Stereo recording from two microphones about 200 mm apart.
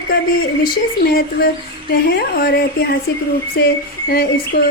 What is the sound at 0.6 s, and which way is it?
A woman's voice, 50° left (ahead or behind).